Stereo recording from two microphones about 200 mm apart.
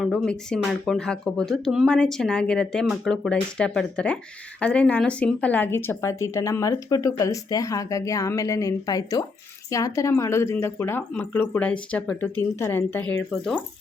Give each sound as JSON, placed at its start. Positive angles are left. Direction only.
{"t": 0.0, "sound": "speech", "side_deg": 5}